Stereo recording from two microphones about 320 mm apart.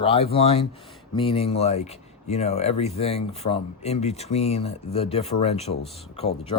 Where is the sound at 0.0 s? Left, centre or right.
Centre.